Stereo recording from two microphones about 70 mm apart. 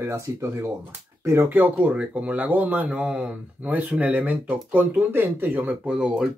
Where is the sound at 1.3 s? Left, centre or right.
Right.